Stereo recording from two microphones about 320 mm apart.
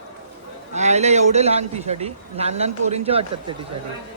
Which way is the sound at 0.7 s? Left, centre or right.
Right.